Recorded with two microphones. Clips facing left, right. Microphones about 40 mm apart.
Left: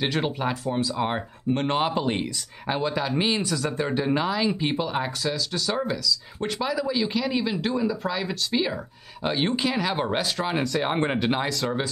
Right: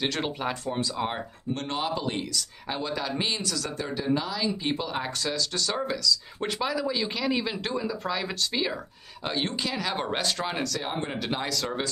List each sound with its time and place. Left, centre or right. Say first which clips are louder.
0.0 s speech: left 3 dB; centre
1.5 s speech: left 6 dB; left
4.8 s speech: left 3 dB; centre
9.2 s speech: left 5 dB; centre
10.6 s speech: left 6 dB; left
11.4 s speech: left 3 dB; centre